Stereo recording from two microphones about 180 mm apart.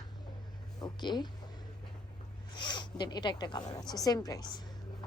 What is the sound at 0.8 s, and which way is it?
Speech, 25° left (ahead or behind).